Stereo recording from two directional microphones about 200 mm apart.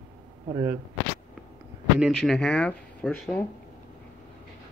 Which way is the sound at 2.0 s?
Centre (ahead or behind).